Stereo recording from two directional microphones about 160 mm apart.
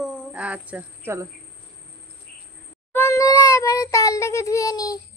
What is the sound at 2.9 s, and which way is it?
Child singing, 15° left (ahead or behind).